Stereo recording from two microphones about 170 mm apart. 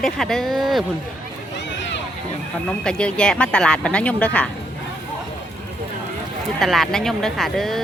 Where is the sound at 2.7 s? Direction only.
5° left (ahead or behind).